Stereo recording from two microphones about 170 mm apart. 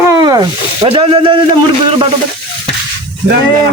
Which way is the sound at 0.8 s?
35° right (ahead or behind).